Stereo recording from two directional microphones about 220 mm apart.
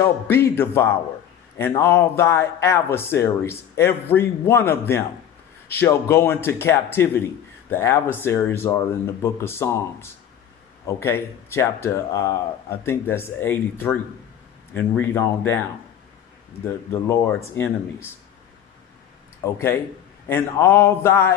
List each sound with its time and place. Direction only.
0.0 s speech: 10° left (ahead or behind)
16.9 s speech: 15° left (ahead or behind)
19.4 s speech: 10° left (ahead or behind)